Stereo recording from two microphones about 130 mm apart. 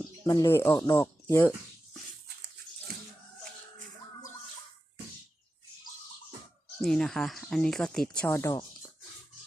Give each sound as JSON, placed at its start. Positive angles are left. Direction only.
{"t": 0.3, "sound": "speech", "side_deg": 25}
{"t": 6.8, "sound": "speech", "side_deg": 5}
{"t": 8.3, "sound": "speech", "side_deg": 25}